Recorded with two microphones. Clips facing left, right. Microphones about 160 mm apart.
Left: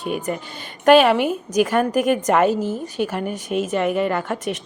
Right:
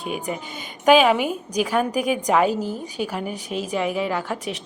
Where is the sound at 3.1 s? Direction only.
5° left (ahead or behind).